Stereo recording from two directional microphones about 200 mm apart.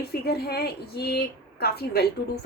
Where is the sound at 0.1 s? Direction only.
50° left (ahead or behind).